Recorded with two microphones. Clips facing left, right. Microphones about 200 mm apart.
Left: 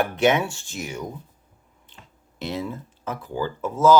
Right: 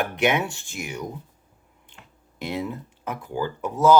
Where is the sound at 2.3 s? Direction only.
15° right (ahead or behind).